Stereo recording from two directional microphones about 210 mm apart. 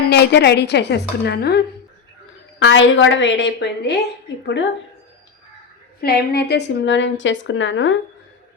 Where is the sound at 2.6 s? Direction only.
65° left (ahead or behind).